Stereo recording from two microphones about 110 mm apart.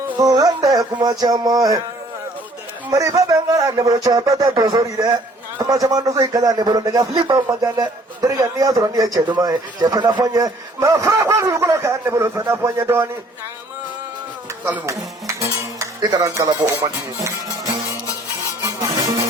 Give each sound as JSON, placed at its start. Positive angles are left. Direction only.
{"t": 0.2, "sound": "a man's voice", "side_deg": -35}
{"t": 2.9, "sound": "a man's voice", "side_deg": -30}
{"t": 14.6, "sound": "speech", "side_deg": -15}
{"t": 15.4, "sound": "music", "side_deg": -35}
{"t": 16.6, "sound": "a man's voice", "side_deg": -20}
{"t": 18.6, "sound": "music", "side_deg": -30}